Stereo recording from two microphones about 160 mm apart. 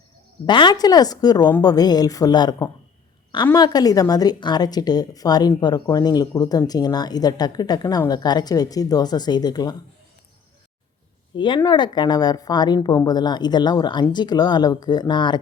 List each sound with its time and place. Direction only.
0.4 s speech: 30° left (ahead or behind)
11.3 s speech: 30° left (ahead or behind)